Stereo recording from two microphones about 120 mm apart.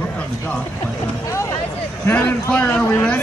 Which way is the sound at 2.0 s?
15° left (ahead or behind).